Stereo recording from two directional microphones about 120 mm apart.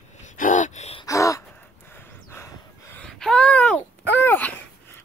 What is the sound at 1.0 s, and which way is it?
Gasp, 25° left (ahead or behind).